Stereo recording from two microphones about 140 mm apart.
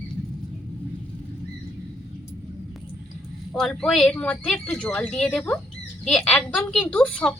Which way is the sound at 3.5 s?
5° left (ahead or behind).